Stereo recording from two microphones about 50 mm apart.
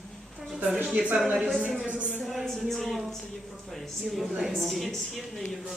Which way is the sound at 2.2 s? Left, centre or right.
Centre.